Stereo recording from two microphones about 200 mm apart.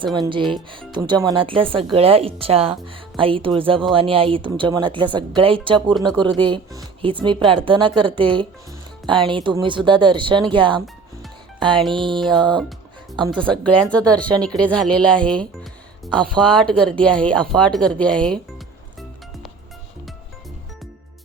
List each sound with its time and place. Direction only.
0.0 s speech: 20° right (ahead or behind)
11.9 s speech: 25° right (ahead or behind)
13.3 s speech: 5° left (ahead or behind)